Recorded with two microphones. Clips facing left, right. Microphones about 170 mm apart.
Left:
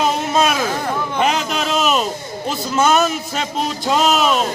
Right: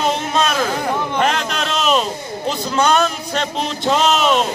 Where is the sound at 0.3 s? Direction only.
10° left (ahead or behind).